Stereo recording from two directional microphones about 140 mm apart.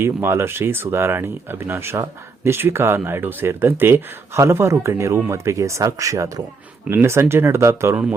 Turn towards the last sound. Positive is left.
turn(degrees=-20)  # may be behind; listen again after turning